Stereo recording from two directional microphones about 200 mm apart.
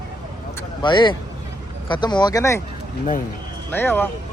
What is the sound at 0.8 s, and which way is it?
Speech, 25° left (ahead or behind).